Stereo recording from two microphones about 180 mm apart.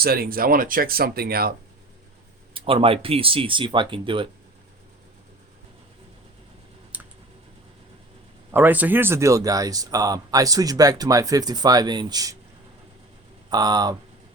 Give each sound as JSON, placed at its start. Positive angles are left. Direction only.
{"t": 0.0, "sound": "speech", "side_deg": -55}
{"t": 2.5, "sound": "speech", "side_deg": -30}
{"t": 6.9, "sound": "a sound", "side_deg": -10}
{"t": 8.5, "sound": "speech", "side_deg": -10}
{"t": 13.5, "sound": "speech", "side_deg": -20}